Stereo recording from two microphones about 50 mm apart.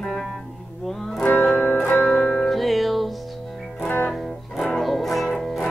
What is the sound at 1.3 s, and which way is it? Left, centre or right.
Music, left.